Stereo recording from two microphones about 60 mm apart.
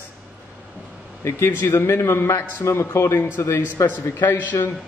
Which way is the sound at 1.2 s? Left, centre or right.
Left.